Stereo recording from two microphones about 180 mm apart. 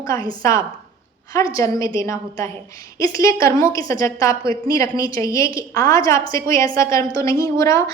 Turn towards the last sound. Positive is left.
turn(degrees=15)  # may be behind; listen again after turning